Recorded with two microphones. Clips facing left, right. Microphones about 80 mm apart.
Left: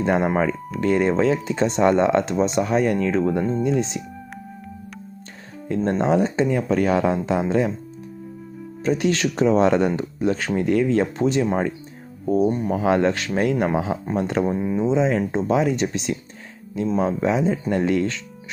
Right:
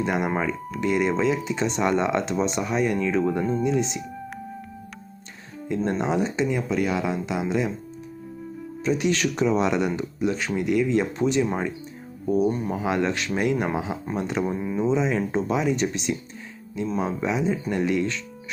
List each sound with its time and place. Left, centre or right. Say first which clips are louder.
0.0 s speech: left 4 dB; left
0.8 s speech: left 4 dB; left
3.2 s speech: left 2 dB; left
5.8 s speech: left 5 dB; left
8.8 s speech: left 2 dB; left
12.7 s speech: left 5 dB; left